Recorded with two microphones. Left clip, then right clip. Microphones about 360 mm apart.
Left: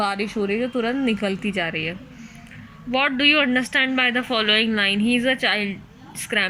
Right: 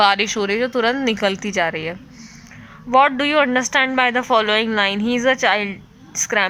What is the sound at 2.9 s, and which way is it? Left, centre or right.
A woman's voice, centre.